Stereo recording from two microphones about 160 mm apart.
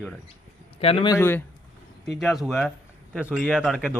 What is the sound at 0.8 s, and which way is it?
Speech, 35° left (ahead or behind).